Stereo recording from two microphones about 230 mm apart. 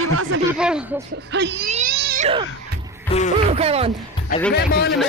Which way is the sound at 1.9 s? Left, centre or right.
Right.